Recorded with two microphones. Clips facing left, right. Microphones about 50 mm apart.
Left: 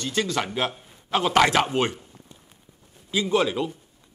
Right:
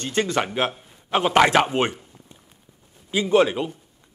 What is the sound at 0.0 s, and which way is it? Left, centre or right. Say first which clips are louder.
Speech: right 3 dB; right.